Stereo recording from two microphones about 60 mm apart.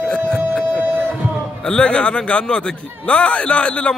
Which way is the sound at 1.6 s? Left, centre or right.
Centre.